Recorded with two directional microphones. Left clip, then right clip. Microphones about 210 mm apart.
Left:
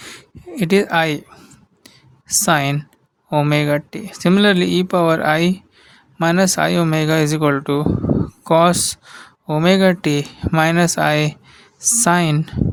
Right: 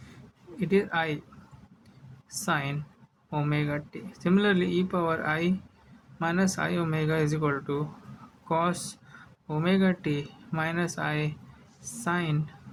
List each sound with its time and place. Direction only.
0.0 s a sound: 55° left (ahead or behind)
1.8 s whispering: 55° left (ahead or behind)
3.2 s speech: 55° left (ahead or behind)